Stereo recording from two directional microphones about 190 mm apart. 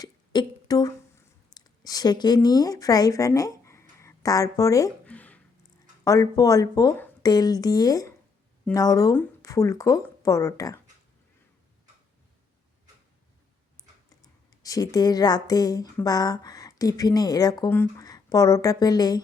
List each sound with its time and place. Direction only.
0.0 s a sound: 20° left (ahead or behind)
1.5 s speech: 20° left (ahead or behind)
14.2 s speech: 20° left (ahead or behind)